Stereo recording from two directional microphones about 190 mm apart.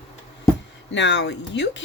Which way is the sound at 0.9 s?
70° left (ahead or behind).